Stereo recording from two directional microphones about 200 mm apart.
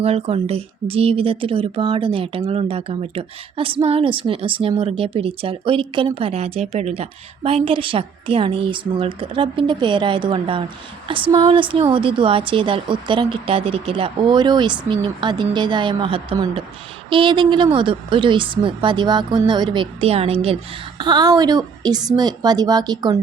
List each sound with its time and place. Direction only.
0.0 s speech: 30° right (ahead or behind)